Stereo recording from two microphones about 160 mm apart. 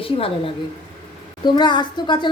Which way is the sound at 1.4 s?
30° left (ahead or behind).